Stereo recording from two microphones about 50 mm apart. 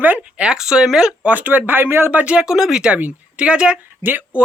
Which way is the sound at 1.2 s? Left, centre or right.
Right.